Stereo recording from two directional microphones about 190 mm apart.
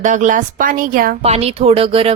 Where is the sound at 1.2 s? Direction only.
30° right (ahead or behind).